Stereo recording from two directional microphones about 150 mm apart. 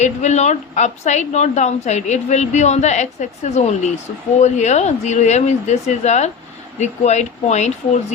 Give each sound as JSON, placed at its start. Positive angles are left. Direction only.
{"t": 0.0, "sound": "a woman's voice", "side_deg": 50}